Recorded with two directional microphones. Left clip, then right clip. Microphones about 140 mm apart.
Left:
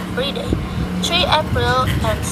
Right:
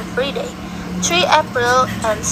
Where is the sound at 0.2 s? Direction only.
35° right (ahead or behind).